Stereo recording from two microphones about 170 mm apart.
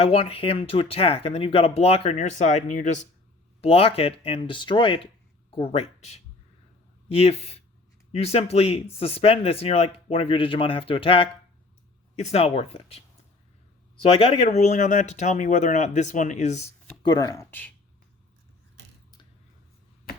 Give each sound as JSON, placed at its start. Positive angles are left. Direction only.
{"t": 0.0, "sound": "speech", "side_deg": 35}
{"t": 3.6, "sound": "speech", "side_deg": 35}
{"t": 14.0, "sound": "speech", "side_deg": 35}
{"t": 17.0, "sound": "speech", "side_deg": 25}